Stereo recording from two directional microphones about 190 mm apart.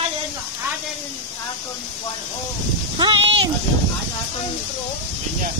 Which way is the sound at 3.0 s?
25° right (ahead or behind).